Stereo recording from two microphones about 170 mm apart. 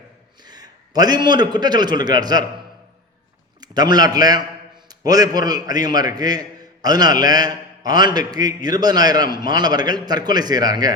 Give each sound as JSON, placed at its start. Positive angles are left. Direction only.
{"t": 0.3, "sound": "a man's voice", "side_deg": -25}
{"t": 3.6, "sound": "a man's voice", "side_deg": -25}